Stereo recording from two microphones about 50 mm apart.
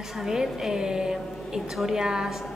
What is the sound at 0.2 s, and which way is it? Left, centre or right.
A woman's voice, centre.